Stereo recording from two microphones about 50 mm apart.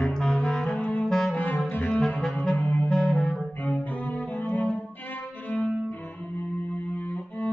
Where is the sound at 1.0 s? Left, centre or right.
Centre.